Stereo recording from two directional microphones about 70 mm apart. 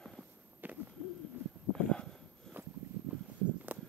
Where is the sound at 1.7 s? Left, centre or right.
Centre.